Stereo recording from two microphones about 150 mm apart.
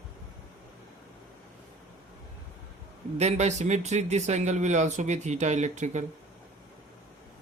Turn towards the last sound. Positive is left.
turn(degrees=-50)  # may be behind; listen again after turning